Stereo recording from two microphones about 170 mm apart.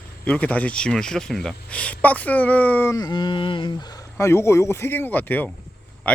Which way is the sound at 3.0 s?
25° left (ahead or behind).